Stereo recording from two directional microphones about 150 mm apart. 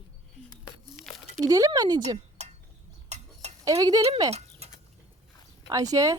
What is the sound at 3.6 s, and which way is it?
Speech, 25° right (ahead or behind).